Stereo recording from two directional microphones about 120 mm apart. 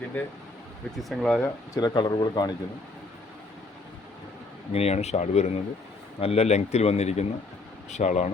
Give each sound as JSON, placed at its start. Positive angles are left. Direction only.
{"t": 0.1, "sound": "speech", "side_deg": 15}
{"t": 0.9, "sound": "speech", "side_deg": 0}
{"t": 1.7, "sound": "speech", "side_deg": 35}
{"t": 4.7, "sound": "speech", "side_deg": 60}